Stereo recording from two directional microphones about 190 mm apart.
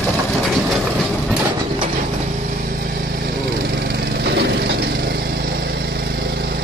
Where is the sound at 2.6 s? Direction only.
50° right (ahead or behind).